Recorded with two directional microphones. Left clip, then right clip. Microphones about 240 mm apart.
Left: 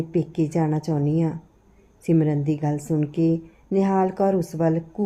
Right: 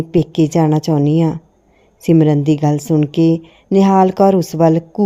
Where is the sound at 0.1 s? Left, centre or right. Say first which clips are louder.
Right 11 dB; right.